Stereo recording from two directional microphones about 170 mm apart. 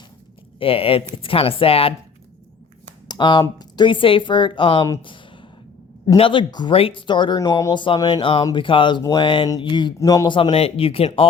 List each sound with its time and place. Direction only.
0.6 s speech: 35° left (ahead or behind)
3.1 s speech: 25° left (ahead or behind)
5.0 s a sound: 30° left (ahead or behind)
6.1 s speech: 30° left (ahead or behind)